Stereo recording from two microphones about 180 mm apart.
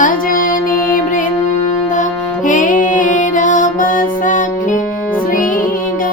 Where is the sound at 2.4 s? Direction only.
45° left (ahead or behind).